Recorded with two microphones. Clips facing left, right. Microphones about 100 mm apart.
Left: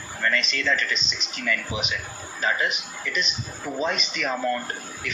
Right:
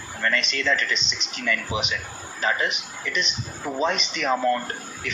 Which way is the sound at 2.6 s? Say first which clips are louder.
Even; 40° left (ahead or behind).